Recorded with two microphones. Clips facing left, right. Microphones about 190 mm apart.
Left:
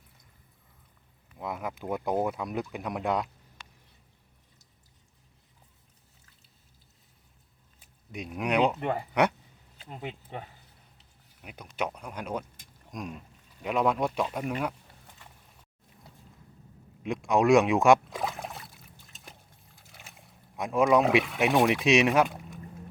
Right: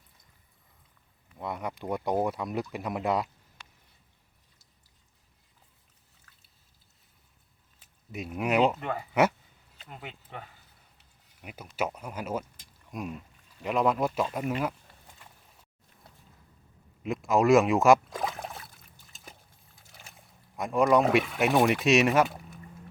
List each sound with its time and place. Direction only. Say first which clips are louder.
1.4 s speech: even; centre (ahead or behind)
8.1 s speech: right 1 dB; 5° right (ahead or behind)
8.8 s speech: even; 30° left (ahead or behind)
11.4 s speech: right 1 dB; 5° right (ahead or behind)
17.0 s a sound: even; centre (ahead or behind)
19.9 s speech: left 1 dB; centre (ahead or behind)